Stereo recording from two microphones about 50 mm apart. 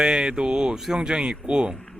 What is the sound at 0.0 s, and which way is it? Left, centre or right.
Speech, centre.